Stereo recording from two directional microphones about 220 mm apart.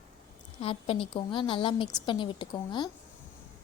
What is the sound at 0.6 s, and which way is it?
A woman's voice, 25° left (ahead or behind).